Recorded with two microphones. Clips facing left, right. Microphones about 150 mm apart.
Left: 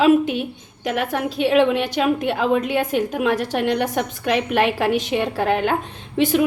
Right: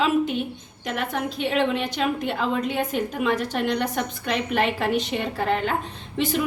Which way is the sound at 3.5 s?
55° left (ahead or behind).